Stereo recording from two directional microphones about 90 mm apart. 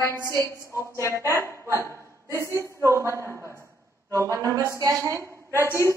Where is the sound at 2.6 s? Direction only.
35° right (ahead or behind).